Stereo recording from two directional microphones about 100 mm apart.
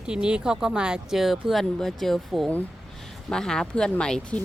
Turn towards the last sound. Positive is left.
turn(degrees=10)  # may be behind; listen again after turning